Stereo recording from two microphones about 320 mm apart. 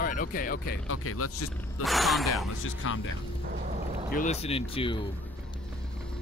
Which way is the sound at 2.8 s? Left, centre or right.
Left.